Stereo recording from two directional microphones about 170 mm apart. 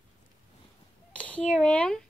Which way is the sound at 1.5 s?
5° left (ahead or behind).